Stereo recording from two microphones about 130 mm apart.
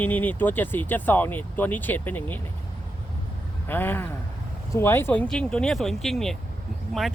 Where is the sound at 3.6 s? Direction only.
15° left (ahead or behind).